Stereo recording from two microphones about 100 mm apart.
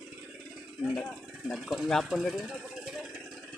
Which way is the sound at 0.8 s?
10° left (ahead or behind).